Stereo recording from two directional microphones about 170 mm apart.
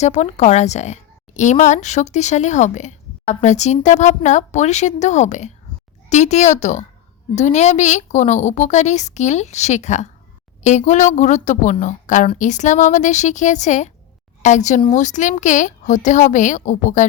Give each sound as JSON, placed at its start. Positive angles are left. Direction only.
{"t": 0.0, "sound": "a woman's voice", "side_deg": 40}